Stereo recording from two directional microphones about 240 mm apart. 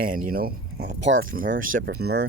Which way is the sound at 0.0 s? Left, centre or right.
Right.